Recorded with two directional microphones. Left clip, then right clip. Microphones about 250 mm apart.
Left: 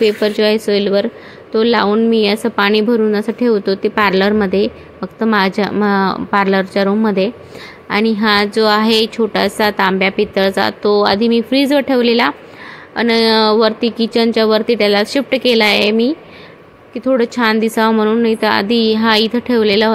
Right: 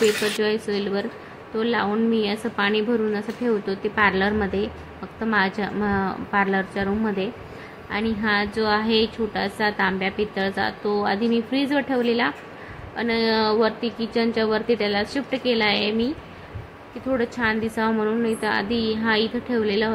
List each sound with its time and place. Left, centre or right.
0.0 s a woman's voice: left